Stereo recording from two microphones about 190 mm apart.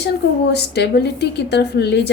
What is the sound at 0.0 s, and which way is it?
A woman's voice, 60° left (ahead or behind).